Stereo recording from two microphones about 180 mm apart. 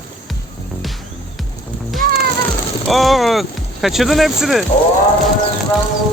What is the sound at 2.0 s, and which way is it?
Music, 55° right (ahead or behind).